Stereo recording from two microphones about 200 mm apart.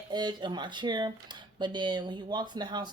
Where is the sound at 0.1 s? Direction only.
20° right (ahead or behind).